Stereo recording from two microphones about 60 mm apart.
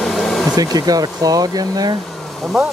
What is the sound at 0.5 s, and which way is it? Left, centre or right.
Speech, right.